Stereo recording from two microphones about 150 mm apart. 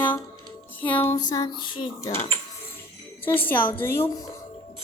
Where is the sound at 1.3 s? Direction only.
30° left (ahead or behind).